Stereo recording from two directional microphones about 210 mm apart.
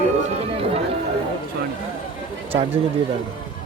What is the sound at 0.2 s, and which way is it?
Chatter, 25° right (ahead or behind).